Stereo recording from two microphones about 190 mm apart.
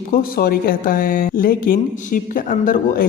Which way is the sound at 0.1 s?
50° left (ahead or behind).